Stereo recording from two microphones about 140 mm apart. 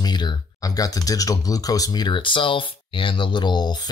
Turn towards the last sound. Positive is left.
turn(degrees=30)  # may be behind; listen again after turning